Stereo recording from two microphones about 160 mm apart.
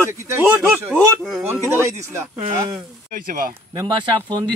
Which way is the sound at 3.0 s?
60° right (ahead or behind).